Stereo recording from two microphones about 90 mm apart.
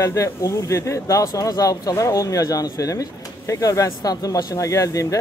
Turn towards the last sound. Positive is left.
turn(degrees=35)  # may be behind; listen again after turning